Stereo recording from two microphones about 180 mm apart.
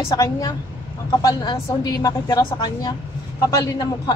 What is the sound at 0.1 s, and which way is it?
A woman's voice, 20° left (ahead or behind).